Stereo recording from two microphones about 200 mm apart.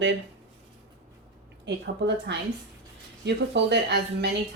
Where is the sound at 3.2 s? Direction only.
60° right (ahead or behind).